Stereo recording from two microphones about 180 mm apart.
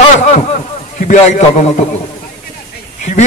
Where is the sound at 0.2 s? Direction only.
40° left (ahead or behind).